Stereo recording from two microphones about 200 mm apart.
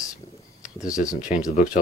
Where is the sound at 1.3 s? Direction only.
40° left (ahead or behind).